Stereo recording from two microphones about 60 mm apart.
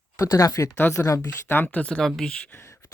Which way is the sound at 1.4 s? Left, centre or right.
Left.